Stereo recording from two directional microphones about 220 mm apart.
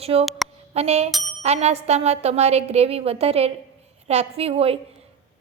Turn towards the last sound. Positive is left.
turn(degrees=-25)  # may be behind; listen again after turning